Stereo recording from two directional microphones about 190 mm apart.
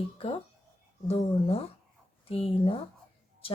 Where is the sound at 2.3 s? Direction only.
30° left (ahead or behind).